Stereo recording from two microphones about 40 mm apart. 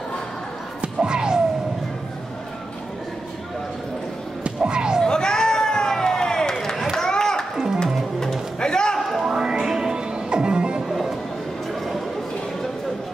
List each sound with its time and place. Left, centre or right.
1.0 s music: centre
4.4 s music: right
5.0 s run: centre
7.0 s a sound: centre
7.5 s music: centre
8.5 s a sound: centre
9.2 s music: centre
10.9 s music: centre